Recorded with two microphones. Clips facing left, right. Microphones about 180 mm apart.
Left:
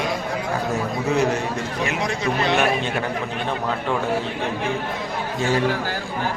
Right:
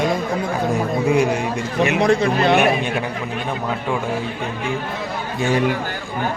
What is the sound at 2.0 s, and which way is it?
Speech, 55° right (ahead or behind).